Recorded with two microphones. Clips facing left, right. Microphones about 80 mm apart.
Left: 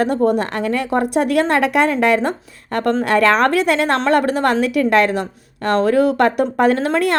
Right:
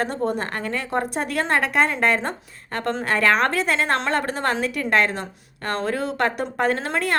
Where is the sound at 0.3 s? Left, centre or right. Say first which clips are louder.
Left 8 dB; left.